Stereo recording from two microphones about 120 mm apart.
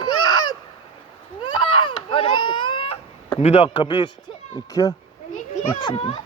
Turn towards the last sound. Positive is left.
turn(degrees=40)  # may be behind; listen again after turning